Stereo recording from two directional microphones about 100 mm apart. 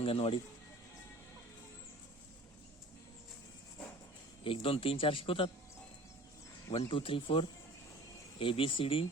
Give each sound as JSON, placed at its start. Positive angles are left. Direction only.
{"t": 0.0, "sound": "speech", "side_deg": 70}
{"t": 4.4, "sound": "speech", "side_deg": 65}
{"t": 6.8, "sound": "speech", "side_deg": 60}